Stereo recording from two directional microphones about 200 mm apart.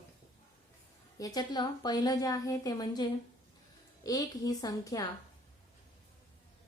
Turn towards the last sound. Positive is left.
turn(degrees=20)  # may be behind; listen again after turning